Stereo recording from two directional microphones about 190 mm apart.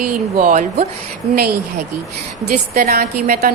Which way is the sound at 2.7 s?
55° right (ahead or behind).